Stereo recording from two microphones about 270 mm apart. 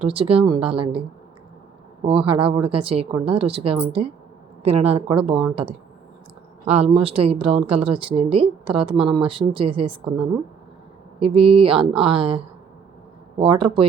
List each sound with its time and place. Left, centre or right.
0.0 s speech: right
11.2 s speech: right
13.4 s speech: centre